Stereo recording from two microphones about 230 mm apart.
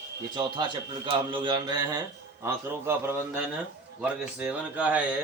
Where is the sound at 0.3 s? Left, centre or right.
Centre.